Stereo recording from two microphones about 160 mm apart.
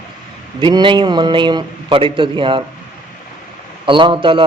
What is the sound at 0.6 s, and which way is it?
A man's voice, 30° right (ahead or behind).